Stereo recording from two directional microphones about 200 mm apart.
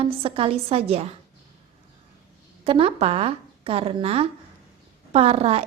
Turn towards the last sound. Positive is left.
turn(degrees=-30)  # may be behind; listen again after turning